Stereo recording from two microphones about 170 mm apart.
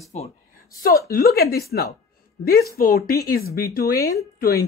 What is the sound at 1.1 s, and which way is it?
A woman's voice, 60° left (ahead or behind).